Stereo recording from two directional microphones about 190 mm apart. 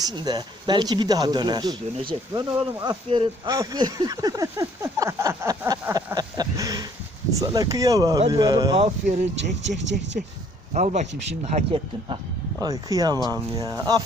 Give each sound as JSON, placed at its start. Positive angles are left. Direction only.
{"t": 0.0, "sound": "speech", "side_deg": -20}
{"t": 8.7, "sound": "speech", "side_deg": -35}
{"t": 10.8, "sound": "speech", "side_deg": -35}
{"t": 12.5, "sound": "speech", "side_deg": -20}